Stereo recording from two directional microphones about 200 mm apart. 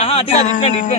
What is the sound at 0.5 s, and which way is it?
Speech, 40° left (ahead or behind).